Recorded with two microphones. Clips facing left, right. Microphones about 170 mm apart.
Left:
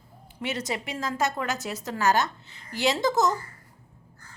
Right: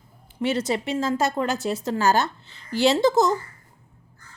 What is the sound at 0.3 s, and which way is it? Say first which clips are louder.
A woman's voice: right 7 dB; 30° right (ahead or behind).